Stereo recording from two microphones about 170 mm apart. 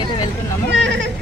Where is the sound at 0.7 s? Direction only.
90° right.